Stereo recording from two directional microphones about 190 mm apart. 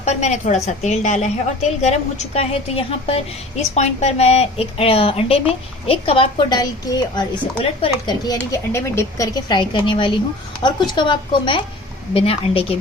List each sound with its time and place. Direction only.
0.0 s a woman's voice: 35° left (ahead or behind)